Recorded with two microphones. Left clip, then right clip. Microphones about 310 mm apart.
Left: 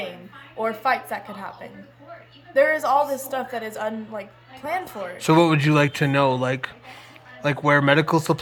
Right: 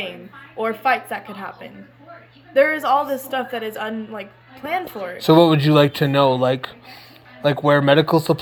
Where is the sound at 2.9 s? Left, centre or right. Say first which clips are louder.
Right 2 dB; left.